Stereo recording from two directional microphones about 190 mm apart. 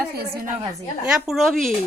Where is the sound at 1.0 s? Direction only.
5° right (ahead or behind).